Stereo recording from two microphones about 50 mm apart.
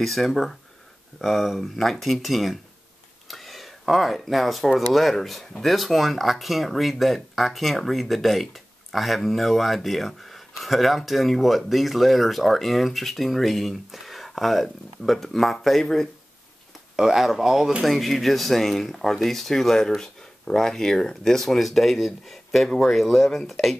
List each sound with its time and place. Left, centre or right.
0.0 s speech: centre
3.3 s a sound: centre
4.7 s speech: centre
16.9 s speech: centre